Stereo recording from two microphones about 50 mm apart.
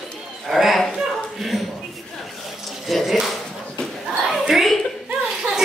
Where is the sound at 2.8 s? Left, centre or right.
Centre.